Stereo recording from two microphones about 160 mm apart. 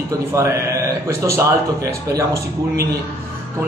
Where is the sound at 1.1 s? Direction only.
15° right (ahead or behind).